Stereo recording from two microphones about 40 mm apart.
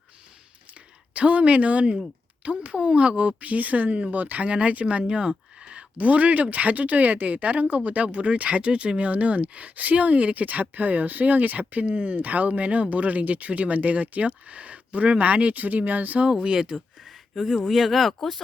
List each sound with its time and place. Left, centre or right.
0.7 s a sound: right
2.4 s speech: right
4.4 s speech: right
6.0 s speech: right
11.9 s speech: right
12.1 s speech: right
16.3 s speech: centre
17.3 s speech: centre